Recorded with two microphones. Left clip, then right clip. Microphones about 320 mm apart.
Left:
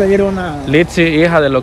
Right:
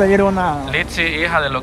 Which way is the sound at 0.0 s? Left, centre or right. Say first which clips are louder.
Left 1 dB; centre.